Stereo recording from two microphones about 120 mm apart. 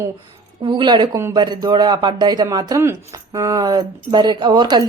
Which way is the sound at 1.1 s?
25° right (ahead or behind).